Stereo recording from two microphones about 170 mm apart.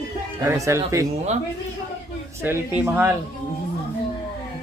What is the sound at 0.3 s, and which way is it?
Speech, 20° right (ahead or behind).